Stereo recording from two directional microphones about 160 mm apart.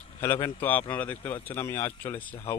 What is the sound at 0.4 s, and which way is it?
Speech, 10° left (ahead or behind).